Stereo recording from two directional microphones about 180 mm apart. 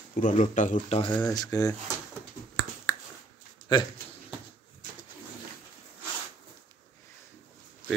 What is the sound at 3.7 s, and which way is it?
Speech, 25° left (ahead or behind).